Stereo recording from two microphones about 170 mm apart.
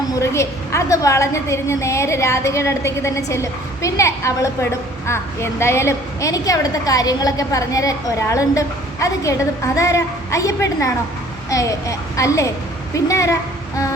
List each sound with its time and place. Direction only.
0.2 s a woman's voice: 15° left (ahead or behind)